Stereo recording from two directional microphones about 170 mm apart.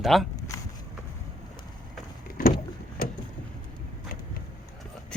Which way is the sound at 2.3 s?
55° left (ahead or behind).